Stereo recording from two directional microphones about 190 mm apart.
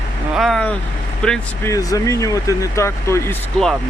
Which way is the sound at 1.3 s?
15° left (ahead or behind).